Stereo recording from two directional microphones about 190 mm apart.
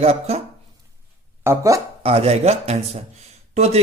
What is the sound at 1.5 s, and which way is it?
Speech, 15° right (ahead or behind).